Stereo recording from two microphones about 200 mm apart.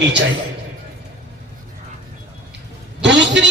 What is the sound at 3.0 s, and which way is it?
Speech, 60° right (ahead or behind).